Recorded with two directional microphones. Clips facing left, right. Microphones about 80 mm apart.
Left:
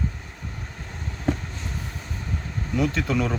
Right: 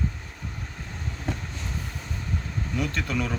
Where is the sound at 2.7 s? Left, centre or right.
Centre.